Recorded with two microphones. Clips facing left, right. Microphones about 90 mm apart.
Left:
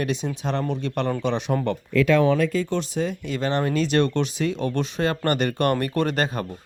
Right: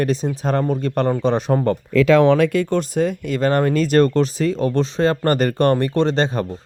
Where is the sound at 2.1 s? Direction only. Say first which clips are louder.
Right 6 dB; 90° right.